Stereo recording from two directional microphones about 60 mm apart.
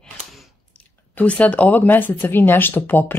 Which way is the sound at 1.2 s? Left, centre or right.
Left.